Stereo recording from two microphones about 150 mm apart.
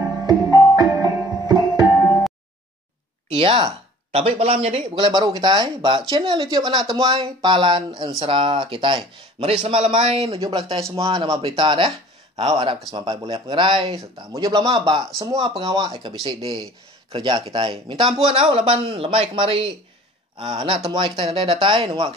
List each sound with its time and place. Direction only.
0.3 s music: 25° right (ahead or behind)
3.3 s speech: 35° right (ahead or behind)
11.1 s a man's voice: 30° right (ahead or behind)